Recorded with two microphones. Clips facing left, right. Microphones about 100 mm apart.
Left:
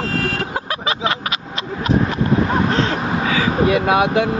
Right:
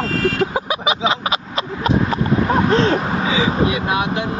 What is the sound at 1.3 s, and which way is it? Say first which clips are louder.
Speech: right 3 dB; 35° right (ahead or behind).